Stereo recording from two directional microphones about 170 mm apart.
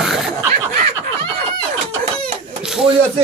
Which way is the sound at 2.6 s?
5° right (ahead or behind).